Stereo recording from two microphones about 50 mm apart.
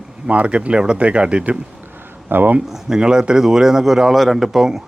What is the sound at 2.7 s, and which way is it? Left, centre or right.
A man's voice, centre.